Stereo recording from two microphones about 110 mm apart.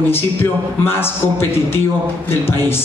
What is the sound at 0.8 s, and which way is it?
Speech, 20° left (ahead or behind).